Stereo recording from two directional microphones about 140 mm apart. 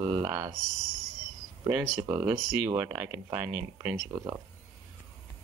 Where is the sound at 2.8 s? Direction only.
15° right (ahead or behind).